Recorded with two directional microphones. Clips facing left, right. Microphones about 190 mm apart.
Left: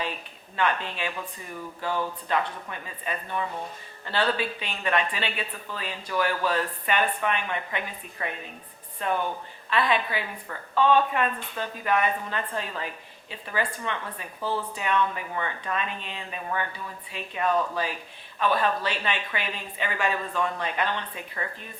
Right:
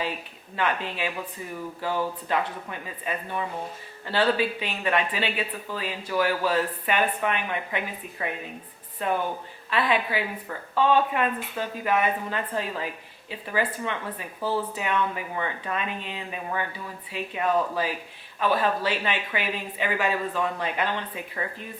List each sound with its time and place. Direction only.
0.0 s a woman's voice: 10° right (ahead or behind)